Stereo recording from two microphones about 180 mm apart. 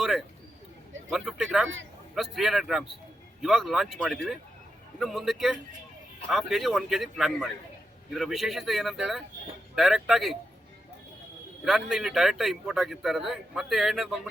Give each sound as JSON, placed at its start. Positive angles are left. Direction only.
{"t": 0.0, "sound": "a sound", "side_deg": 0}
{"t": 1.1, "sound": "a man's voice", "side_deg": -5}
{"t": 1.6, "sound": "a man's voice", "side_deg": -90}
{"t": 2.1, "sound": "a man's voice", "side_deg": 0}
{"t": 11.6, "sound": "a man's voice", "side_deg": 0}